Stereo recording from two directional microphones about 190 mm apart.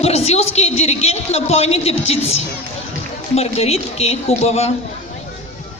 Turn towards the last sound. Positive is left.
turn(degrees=35)  # may be behind; listen again after turning